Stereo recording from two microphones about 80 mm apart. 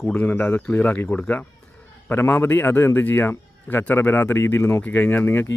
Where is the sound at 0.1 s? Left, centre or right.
Centre.